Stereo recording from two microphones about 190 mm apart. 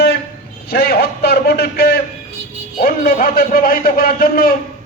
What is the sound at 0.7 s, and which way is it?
A man's voice, 55° left (ahead or behind).